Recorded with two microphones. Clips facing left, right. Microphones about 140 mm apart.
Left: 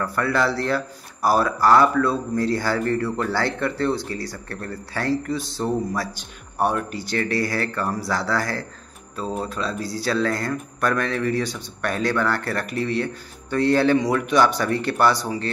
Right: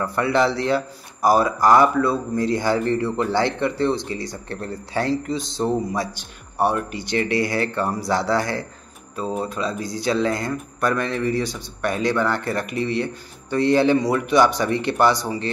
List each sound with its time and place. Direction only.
0.0 s a man's voice: 20° right (ahead or behind)
6.6 s speech: 5° right (ahead or behind)
7.2 s speech: 20° right (ahead or behind)
9.3 s a man's voice: 10° right (ahead or behind)